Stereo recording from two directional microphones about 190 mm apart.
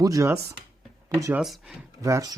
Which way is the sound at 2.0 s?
20° right (ahead or behind).